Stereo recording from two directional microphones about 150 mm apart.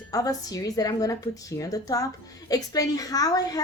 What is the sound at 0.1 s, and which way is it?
A woman's voice, 25° left (ahead or behind).